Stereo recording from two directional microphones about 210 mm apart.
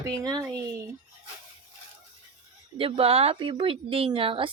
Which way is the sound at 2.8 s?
25° right (ahead or behind).